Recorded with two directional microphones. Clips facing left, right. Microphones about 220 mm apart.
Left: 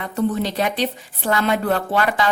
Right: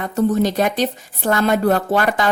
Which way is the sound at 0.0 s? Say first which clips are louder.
Right 4 dB; 40° right (ahead or behind).